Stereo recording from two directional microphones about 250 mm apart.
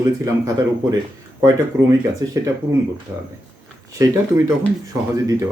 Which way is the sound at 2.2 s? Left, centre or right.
Centre.